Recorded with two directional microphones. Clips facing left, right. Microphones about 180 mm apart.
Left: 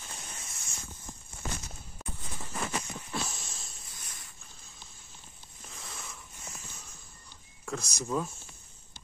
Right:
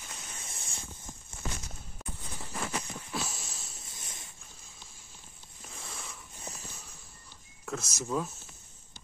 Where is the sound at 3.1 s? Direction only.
5° right (ahead or behind).